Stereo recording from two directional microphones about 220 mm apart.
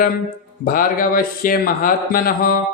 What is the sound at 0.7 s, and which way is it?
Speech, 40° left (ahead or behind).